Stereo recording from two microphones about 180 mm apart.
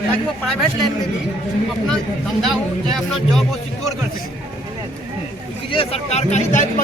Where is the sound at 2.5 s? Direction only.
Centre (ahead or behind).